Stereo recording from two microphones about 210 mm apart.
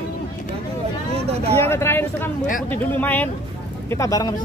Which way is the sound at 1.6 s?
10° left (ahead or behind).